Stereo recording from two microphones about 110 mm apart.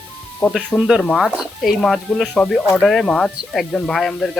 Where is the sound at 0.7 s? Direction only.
5° right (ahead or behind).